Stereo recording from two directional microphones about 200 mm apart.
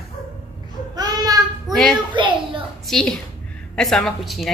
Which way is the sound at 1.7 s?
Centre (ahead or behind).